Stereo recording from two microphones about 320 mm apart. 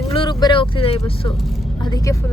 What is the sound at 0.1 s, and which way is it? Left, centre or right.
Speech, centre.